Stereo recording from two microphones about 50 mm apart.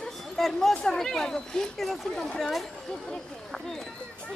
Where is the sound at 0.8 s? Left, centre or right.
Centre.